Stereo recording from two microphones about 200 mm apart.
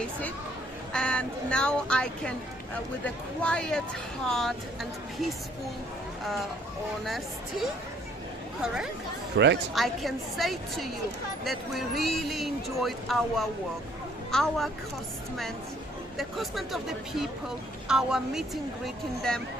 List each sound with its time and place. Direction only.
0.0 s speech: 5° left (ahead or behind)
8.6 s speech: 5° right (ahead or behind)
9.4 s speech: 60° right (ahead or behind)
9.7 s speech: centre (ahead or behind)
16.1 s speech: centre (ahead or behind)